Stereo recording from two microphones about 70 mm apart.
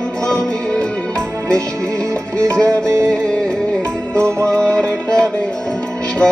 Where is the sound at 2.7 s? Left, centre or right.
Right.